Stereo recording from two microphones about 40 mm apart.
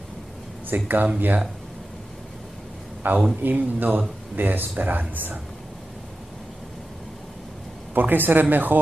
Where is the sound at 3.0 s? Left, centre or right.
Right.